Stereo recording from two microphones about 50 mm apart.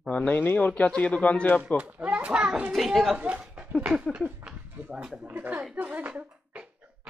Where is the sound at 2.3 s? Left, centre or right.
Centre.